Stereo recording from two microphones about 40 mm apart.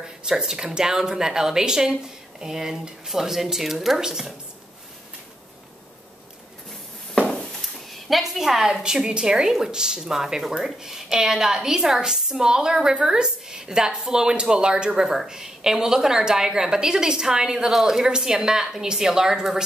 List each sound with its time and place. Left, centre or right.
0.3 s a woman's voice: centre
7.6 s a woman's voice: centre